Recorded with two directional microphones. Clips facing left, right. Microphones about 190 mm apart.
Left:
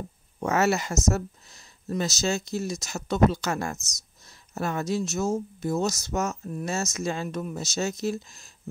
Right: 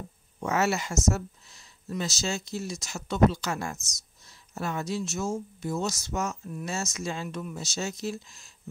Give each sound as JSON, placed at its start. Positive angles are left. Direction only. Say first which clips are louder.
{"t": 0.4, "sound": "speech", "louder": "left 3 dB", "side_deg": 40}